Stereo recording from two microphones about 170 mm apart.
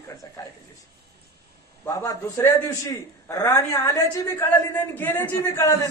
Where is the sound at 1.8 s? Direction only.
20° left (ahead or behind).